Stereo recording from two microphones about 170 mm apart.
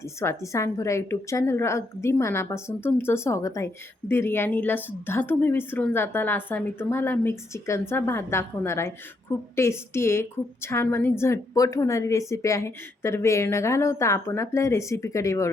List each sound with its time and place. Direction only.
0.0 s a woman's voice: 15° left (ahead or behind)